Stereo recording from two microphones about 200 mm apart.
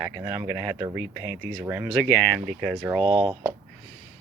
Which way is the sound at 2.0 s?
5° left (ahead or behind).